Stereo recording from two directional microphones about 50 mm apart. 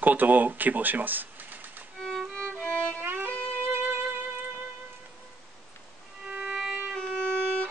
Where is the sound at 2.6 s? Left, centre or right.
Right.